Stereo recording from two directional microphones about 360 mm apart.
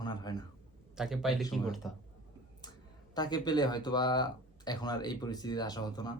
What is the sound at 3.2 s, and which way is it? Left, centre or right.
Speech, centre.